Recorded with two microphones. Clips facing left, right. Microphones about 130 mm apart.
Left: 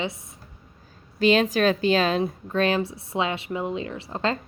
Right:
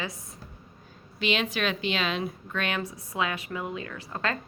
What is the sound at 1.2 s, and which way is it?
A woman's voice, 40° left (ahead or behind).